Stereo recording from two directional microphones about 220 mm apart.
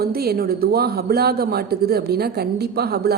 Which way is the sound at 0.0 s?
45° right (ahead or behind).